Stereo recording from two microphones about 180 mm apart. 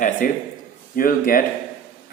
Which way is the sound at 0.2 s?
50° left (ahead or behind).